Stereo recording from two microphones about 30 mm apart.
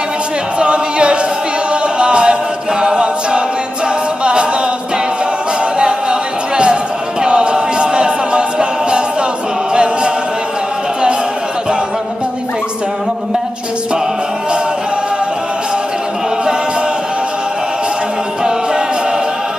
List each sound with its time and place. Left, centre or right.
0.6 s a capella: right
1.7 s music: right
2.8 s a capella: right
5.8 s a sound: right
7.2 s a capella: right
9.7 s chant: right